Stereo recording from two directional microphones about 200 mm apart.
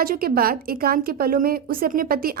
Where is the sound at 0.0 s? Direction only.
45° right (ahead or behind).